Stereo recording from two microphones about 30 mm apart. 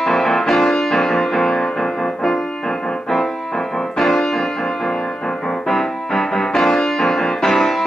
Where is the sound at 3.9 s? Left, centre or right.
Centre.